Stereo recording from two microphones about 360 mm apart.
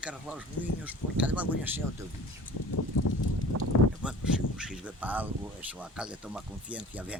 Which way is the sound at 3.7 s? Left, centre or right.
Left.